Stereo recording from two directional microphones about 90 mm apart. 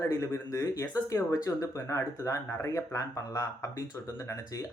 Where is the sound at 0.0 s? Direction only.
35° left (ahead or behind).